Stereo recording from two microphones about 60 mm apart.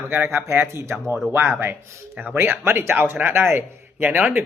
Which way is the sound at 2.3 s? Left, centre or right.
Right.